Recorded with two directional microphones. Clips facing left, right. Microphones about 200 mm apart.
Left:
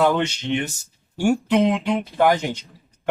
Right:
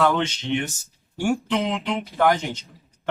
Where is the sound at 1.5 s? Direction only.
15° left (ahead or behind).